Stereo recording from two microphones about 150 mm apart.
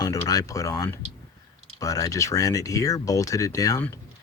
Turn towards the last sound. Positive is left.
turn(degrees=20)  # may be behind; listen again after turning